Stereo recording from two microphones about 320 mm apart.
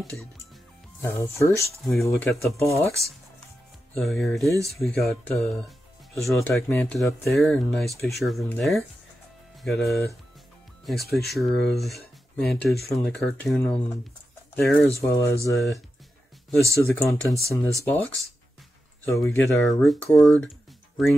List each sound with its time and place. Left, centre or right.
1.0 s speech: centre
11.2 s speech: centre